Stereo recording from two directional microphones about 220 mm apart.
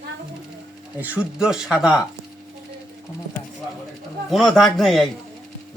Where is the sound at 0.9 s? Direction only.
5° right (ahead or behind).